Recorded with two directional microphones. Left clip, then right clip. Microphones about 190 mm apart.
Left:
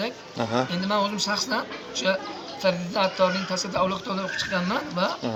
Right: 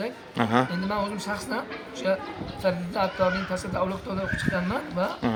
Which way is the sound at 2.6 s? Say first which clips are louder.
Left 2 dB; 15° right (ahead or behind).